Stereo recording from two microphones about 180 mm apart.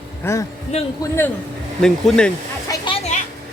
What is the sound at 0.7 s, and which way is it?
Speech, 40° left (ahead or behind).